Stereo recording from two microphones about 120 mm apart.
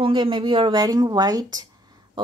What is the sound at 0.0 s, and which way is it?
Speech, 45° right (ahead or behind).